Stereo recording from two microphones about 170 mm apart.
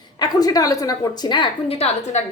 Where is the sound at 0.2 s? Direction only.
20° left (ahead or behind).